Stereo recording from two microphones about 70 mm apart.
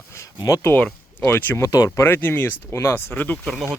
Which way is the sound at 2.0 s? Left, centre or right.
Left.